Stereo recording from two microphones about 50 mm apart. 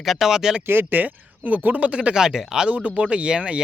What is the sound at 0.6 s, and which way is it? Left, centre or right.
Speech, right.